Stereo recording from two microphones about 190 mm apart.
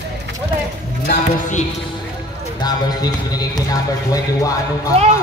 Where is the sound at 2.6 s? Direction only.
20° left (ahead or behind).